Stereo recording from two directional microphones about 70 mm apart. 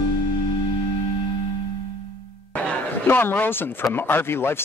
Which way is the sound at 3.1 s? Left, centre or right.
Left.